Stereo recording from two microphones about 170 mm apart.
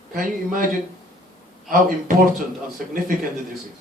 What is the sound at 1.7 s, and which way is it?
Speech, 55° right (ahead or behind).